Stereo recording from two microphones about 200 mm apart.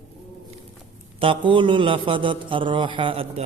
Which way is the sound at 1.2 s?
25° right (ahead or behind).